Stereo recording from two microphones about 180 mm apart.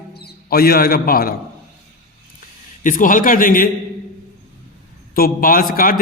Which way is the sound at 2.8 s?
45° left (ahead or behind).